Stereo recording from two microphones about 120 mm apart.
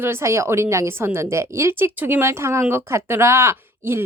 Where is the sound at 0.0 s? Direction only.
20° right (ahead or behind).